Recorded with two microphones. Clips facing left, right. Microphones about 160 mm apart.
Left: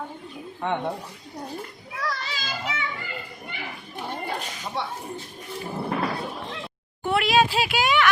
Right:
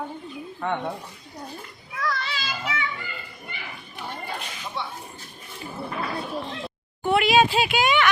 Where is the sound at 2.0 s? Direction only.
40° left (ahead or behind).